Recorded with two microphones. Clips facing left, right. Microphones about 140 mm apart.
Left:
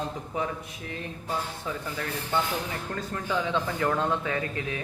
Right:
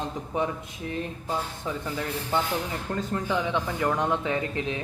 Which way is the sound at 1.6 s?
20° right (ahead or behind).